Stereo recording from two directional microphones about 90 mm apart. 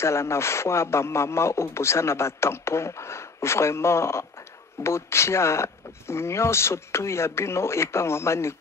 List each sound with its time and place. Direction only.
0.0 s a man's voice: 30° left (ahead or behind)